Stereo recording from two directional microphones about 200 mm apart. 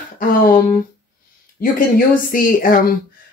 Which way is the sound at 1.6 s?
45° left (ahead or behind).